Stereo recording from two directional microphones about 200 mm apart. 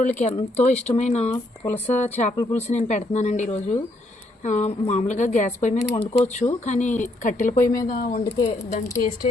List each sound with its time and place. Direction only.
0.0 s speech: 35° left (ahead or behind)
1.3 s speech: 10° left (ahead or behind)
1.9 s speech: 35° left (ahead or behind)
2.3 s speech: 15° left (ahead or behind)
2.6 s speech: 35° left (ahead or behind)
7.6 s speech: 15° left (ahead or behind)
7.9 s speech: 45° left (ahead or behind)
8.2 s speech: 20° left (ahead or behind)